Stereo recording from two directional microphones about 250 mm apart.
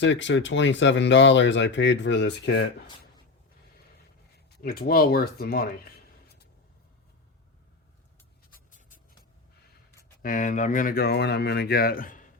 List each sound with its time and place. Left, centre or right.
0.0 s speech: left
4.5 s speech: left
8.5 s writing: left
10.2 s speech: left